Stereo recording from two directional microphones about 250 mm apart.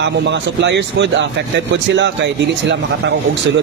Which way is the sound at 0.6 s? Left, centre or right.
Right.